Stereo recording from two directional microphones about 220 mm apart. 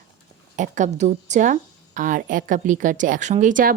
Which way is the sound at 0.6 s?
35° right (ahead or behind).